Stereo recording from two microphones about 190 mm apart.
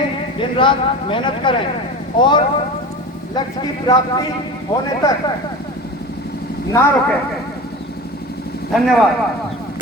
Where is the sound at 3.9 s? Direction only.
20° left (ahead or behind).